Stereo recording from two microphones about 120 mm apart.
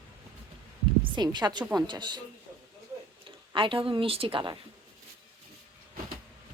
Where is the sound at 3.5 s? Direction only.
45° right (ahead or behind).